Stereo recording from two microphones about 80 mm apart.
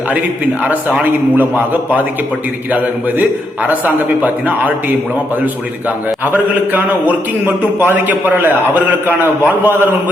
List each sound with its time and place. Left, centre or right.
1.4 s a man's voice: right
6.2 s a man's voice: right